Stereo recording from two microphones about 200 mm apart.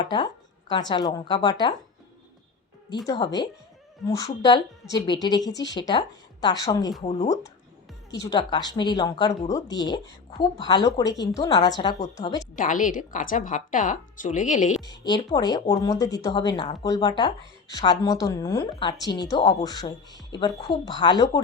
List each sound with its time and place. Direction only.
0.0 s speech: 25° left (ahead or behind)
3.1 s a woman's voice: 15° left (ahead or behind)
8.1 s a woman's voice: 15° left (ahead or behind)
12.5 s speech: 40° left (ahead or behind)
14.8 s a woman's voice: 20° left (ahead or behind)